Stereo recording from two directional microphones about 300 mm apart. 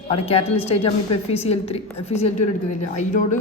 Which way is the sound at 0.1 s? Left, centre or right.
Centre.